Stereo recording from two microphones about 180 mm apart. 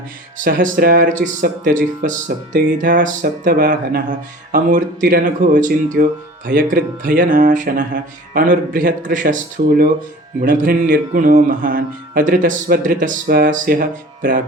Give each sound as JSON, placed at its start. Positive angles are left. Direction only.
{"t": 0.3, "sound": "speech", "side_deg": -50}